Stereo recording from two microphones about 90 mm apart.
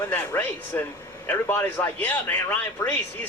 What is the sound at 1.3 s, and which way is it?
Speech, 20° left (ahead or behind).